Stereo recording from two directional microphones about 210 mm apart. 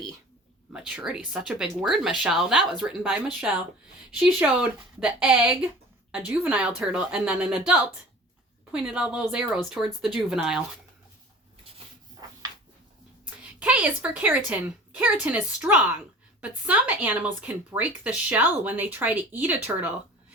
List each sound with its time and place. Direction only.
0.7 s speech: 5° right (ahead or behind)
4.9 s speech: 5° right (ahead or behind)
13.4 s a woman's voice: 5° right (ahead or behind)